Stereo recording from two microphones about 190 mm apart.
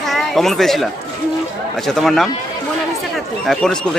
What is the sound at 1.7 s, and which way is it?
Speech, centre (ahead or behind).